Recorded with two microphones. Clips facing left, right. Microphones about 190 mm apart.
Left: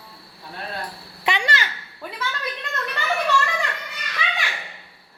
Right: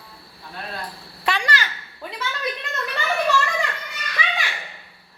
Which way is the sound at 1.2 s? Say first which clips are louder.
Even; 20° left (ahead or behind).